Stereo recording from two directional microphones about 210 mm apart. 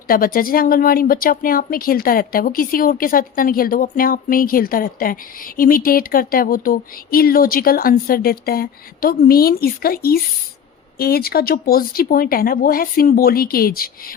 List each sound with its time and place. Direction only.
0.1 s speech: 45° left (ahead or behind)